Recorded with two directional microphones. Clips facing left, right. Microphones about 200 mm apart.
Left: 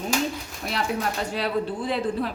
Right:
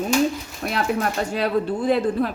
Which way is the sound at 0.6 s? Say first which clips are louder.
Right 4 dB; 55° right (ahead or behind).